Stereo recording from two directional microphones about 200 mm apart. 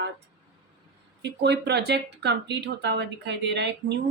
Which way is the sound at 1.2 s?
55° right (ahead or behind).